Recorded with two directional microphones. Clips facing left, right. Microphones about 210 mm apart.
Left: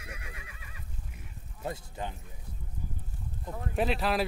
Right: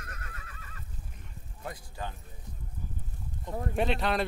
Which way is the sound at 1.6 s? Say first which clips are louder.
Left 3 dB; 20° left (ahead or behind).